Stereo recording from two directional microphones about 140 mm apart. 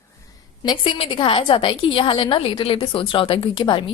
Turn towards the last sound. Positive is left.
turn(degrees=35)  # may be behind; listen again after turning